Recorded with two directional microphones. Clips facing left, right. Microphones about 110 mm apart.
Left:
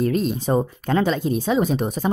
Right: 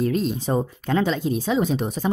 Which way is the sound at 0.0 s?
50° left (ahead or behind).